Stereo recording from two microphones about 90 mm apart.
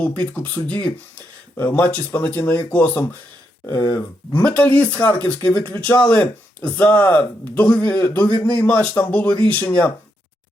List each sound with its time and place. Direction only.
0.0 s speech: 15° left (ahead or behind)